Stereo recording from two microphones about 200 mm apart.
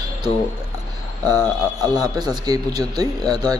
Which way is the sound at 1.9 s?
20° right (ahead or behind).